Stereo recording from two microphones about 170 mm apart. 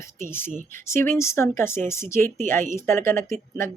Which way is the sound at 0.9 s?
15° left (ahead or behind).